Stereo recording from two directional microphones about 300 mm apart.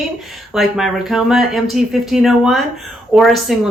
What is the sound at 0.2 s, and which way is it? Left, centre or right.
A woman's voice, centre.